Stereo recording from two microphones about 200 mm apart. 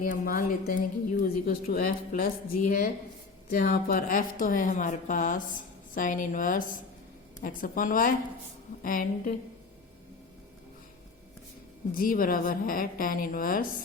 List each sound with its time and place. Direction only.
0.0 s a woman's voice: 45° left (ahead or behind)
11.9 s a woman's voice: 45° left (ahead or behind)